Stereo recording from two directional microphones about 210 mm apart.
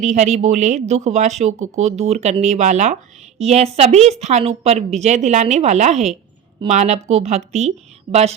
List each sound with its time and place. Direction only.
0.0 s speech: 35° right (ahead or behind)